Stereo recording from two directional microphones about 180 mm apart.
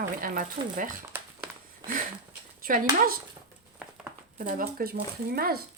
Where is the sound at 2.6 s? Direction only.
50° right (ahead or behind).